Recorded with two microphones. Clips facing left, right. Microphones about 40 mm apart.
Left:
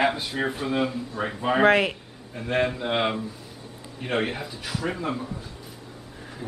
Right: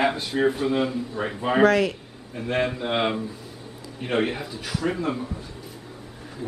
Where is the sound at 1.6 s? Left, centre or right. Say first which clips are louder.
Even; left.